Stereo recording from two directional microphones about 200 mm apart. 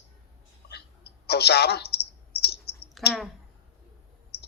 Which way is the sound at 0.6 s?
55° left (ahead or behind).